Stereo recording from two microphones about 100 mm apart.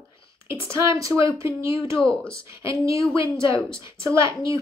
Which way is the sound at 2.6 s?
30° right (ahead or behind).